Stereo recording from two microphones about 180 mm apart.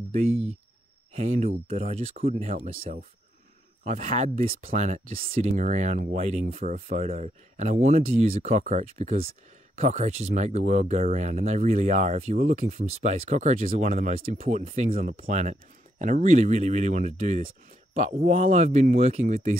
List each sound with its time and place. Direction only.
0.1 s speech: 40° right (ahead or behind); by 14.4 s 55° right (ahead or behind)
14.4 s speech: 35° right (ahead or behind)
15.0 s speech: 45° right (ahead or behind)